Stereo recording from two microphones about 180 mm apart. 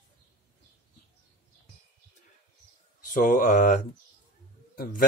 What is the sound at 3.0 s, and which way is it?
Speech, 50° left (ahead or behind).